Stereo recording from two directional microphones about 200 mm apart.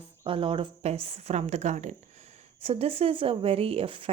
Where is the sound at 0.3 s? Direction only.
25° right (ahead or behind).